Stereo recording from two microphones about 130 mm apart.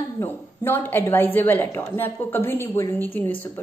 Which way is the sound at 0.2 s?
15° left (ahead or behind).